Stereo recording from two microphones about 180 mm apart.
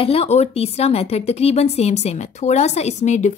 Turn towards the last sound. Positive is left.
turn(degrees=40)  # may be behind; listen again after turning